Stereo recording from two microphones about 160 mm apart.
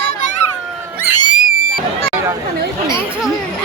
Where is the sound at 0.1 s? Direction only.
50° left (ahead or behind).